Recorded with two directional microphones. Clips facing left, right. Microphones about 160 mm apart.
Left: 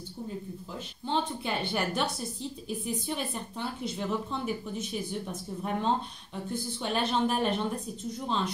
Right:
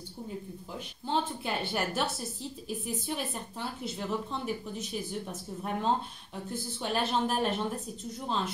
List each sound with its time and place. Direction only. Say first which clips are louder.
0.7 s a woman's voice: even; 5° right (ahead or behind)